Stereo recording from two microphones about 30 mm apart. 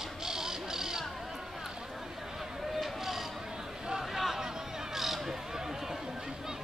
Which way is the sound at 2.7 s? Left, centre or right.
Centre.